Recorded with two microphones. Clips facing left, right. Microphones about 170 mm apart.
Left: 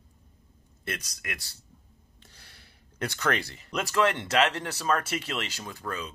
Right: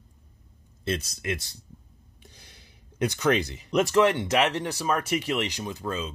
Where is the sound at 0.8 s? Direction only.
25° right (ahead or behind).